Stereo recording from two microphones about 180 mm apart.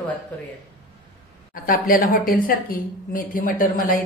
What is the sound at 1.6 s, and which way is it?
A woman's voice, 50° left (ahead or behind).